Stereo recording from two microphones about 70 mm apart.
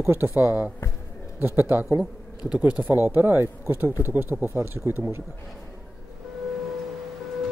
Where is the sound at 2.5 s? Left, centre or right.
Centre; by 5.2 s right.